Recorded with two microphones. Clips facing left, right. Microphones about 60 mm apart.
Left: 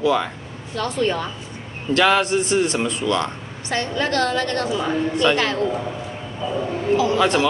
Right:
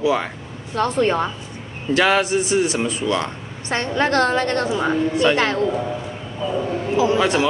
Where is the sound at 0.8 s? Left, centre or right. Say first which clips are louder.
Right 4 dB; right.